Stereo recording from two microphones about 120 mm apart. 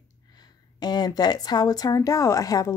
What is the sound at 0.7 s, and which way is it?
A woman's voice, 35° left (ahead or behind).